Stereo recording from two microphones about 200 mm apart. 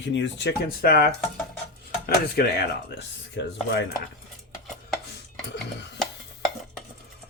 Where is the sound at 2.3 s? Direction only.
55° left (ahead or behind).